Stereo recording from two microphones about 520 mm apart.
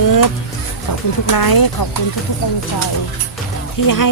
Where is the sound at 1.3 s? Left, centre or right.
Left.